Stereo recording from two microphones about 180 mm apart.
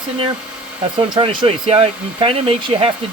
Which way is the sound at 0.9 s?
25° right (ahead or behind).